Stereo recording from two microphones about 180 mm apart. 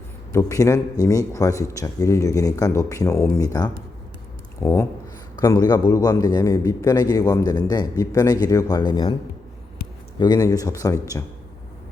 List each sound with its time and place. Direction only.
0.3 s a man's voice: 15° left (ahead or behind)
10.2 s a man's voice: 20° left (ahead or behind)